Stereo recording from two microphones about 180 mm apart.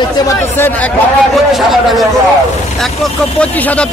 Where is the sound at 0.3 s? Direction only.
10° left (ahead or behind).